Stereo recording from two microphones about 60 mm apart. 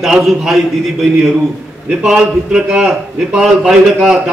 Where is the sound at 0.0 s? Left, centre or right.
Centre.